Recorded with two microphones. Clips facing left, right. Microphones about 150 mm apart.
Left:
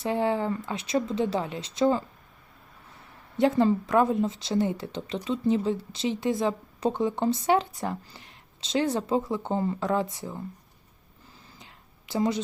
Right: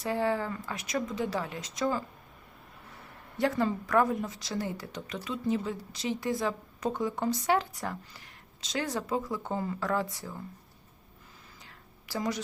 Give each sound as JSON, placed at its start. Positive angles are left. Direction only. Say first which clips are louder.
{"t": 0.0, "sound": "speech", "louder": "left 3 dB", "side_deg": 20}
{"t": 3.3, "sound": "speech", "louder": "left 6 dB", "side_deg": 25}
{"t": 11.6, "sound": "a sound", "louder": "left 1 dB", "side_deg": 20}